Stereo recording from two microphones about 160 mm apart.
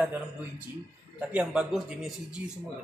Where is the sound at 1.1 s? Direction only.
5° right (ahead or behind).